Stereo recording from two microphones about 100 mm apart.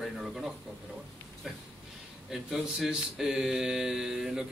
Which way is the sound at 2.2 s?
5° right (ahead or behind).